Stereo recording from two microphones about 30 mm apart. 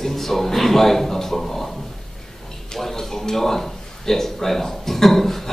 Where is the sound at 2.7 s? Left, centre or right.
Centre.